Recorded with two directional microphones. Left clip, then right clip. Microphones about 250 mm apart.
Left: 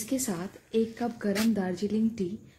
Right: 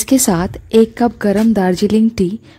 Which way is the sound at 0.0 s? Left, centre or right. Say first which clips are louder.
Right 18 dB; right.